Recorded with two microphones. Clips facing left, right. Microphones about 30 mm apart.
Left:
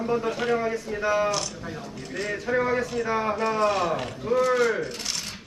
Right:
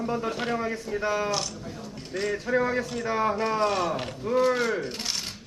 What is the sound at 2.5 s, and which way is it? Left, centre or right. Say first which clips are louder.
Speech: left 1 dB; left.